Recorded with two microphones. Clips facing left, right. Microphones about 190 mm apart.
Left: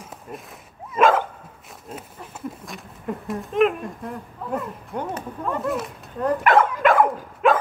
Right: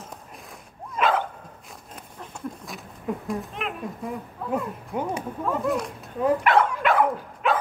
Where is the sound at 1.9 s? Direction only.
Centre (ahead or behind).